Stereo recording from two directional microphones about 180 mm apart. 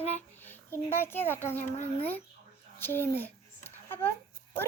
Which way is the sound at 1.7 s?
35° left (ahead or behind).